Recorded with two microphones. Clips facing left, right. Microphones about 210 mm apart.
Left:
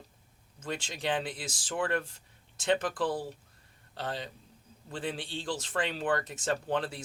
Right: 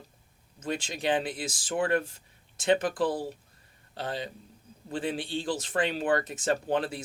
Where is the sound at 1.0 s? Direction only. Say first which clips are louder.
Right 4 dB; 10° right (ahead or behind).